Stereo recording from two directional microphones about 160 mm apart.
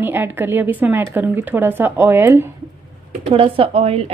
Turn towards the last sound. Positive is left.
turn(degrees=-40)  # may be behind; listen again after turning